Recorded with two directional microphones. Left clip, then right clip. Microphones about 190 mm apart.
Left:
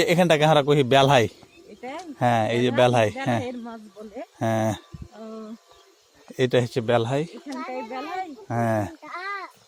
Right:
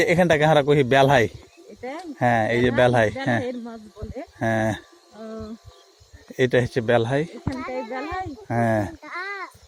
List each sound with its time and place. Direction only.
0.0 s speech: 20° left (ahead or behind)
1.8 s a sound: 60° left (ahead or behind)
2.1 s speech: 15° left (ahead or behind)
3.4 s speech: 55° left (ahead or behind)
4.4 s speech: 20° left (ahead or behind)
5.1 s a sound: 55° left (ahead or behind)
6.3 s speech: 15° left (ahead or behind)
7.5 s speech: 65° left (ahead or behind)
8.4 s speech: 5° left (ahead or behind)
9.0 s a sound: 70° left (ahead or behind)